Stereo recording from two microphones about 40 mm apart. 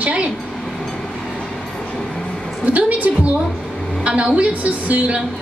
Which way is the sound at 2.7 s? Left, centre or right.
Right.